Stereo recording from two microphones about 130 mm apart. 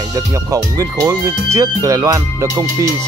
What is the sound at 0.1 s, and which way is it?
Speech, 25° right (ahead or behind).